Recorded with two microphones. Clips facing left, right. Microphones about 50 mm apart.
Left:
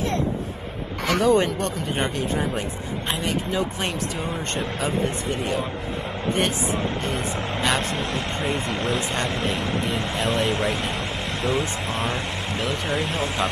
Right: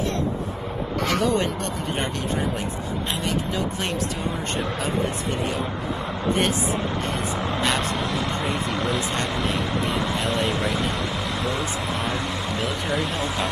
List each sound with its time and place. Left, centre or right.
1.2 s speech: centre
7.1 s vehicle: centre
8.7 s speech: centre
9.5 s vehicle: centre
12.9 s speech: left